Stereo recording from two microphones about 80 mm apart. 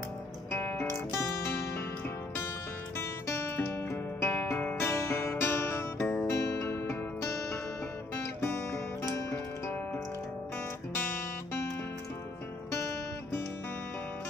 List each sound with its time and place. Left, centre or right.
0.5 s music: left
3.0 s music: left
12.7 s guitar: left